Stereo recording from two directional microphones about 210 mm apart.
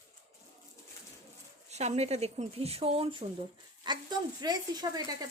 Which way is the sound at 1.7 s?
30° right (ahead or behind).